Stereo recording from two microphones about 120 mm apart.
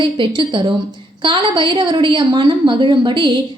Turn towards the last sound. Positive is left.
turn(degrees=-40)  # may be behind; listen again after turning